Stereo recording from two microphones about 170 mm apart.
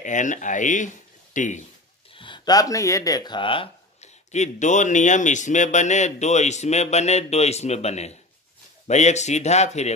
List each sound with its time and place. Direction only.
0.0 s speech: 45° left (ahead or behind)
2.1 s speech: 30° left (ahead or behind)